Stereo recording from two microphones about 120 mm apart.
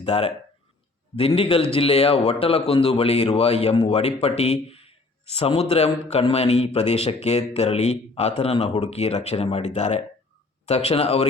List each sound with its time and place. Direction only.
0.0 s a man's voice: 55° left (ahead or behind)
1.4 s a man's voice: 50° left (ahead or behind)